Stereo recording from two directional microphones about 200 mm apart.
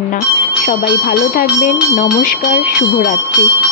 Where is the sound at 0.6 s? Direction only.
45° left (ahead or behind).